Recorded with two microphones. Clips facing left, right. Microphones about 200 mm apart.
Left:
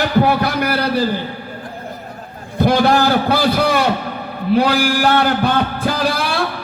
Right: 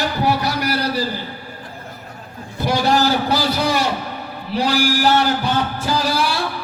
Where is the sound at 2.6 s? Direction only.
55° left (ahead or behind).